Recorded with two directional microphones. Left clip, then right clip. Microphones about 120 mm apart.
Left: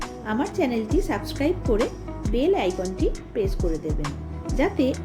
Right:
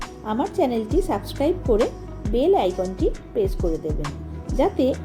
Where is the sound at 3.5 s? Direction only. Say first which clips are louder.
Right 2 dB; centre (ahead or behind).